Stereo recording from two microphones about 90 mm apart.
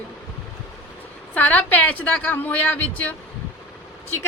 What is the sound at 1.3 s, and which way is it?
A woman's voice, 20° left (ahead or behind).